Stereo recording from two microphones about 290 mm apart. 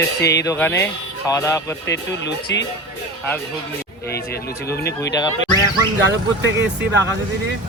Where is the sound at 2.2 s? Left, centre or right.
Left.